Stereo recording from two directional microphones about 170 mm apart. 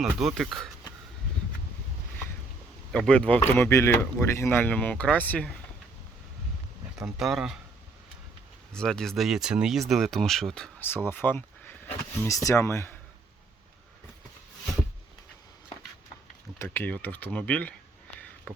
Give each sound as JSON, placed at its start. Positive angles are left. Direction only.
{"t": 0.0, "sound": "speech", "side_deg": 0}
{"t": 2.9, "sound": "speech", "side_deg": 5}
{"t": 7.0, "sound": "speech", "side_deg": 0}
{"t": 8.7, "sound": "speech", "side_deg": 5}
{"t": 16.6, "sound": "speech", "side_deg": 10}